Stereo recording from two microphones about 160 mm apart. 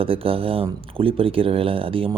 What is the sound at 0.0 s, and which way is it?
Speech, 35° right (ahead or behind).